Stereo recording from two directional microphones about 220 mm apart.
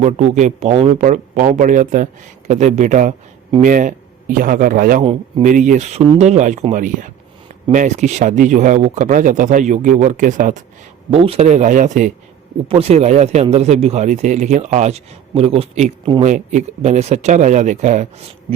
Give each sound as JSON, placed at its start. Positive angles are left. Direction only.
{"t": 0.0, "sound": "speech", "side_deg": -30}